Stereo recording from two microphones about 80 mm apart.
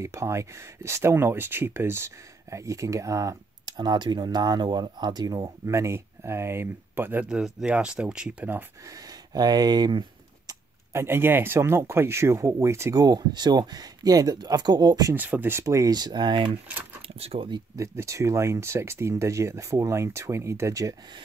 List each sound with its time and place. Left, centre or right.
0.0 s speech: right
3.6 s speech: right
7.2 s speech: centre
8.8 s speech: right
10.9 s speech: right
12.9 s speech: right
15.1 s speech: right
15.6 s speech: right
15.9 s speech: right
17.7 s speech: right